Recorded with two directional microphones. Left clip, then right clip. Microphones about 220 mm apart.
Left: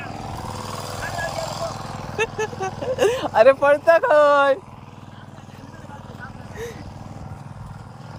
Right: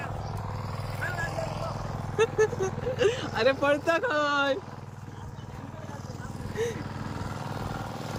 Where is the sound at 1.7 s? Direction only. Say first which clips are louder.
Left 5 dB; 50° left (ahead or behind).